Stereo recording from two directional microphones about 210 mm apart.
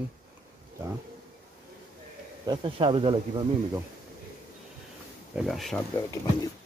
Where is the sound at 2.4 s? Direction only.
25° right (ahead or behind).